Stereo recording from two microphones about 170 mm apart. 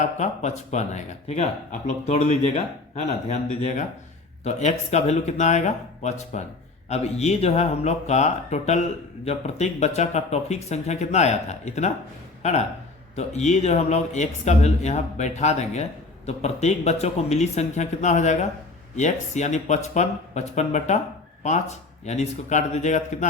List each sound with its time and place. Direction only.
0.0 s speech: 45° left (ahead or behind)